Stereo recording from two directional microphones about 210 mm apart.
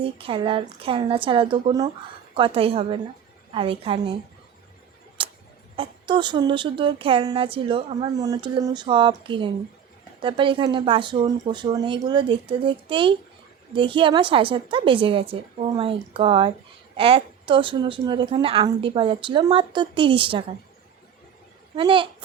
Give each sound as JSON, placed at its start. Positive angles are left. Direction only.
{"t": 0.0, "sound": "speech", "side_deg": -25}
{"t": 5.2, "sound": "a sound", "side_deg": -25}
{"t": 5.7, "sound": "speech", "side_deg": -25}
{"t": 21.8, "sound": "speech", "side_deg": -25}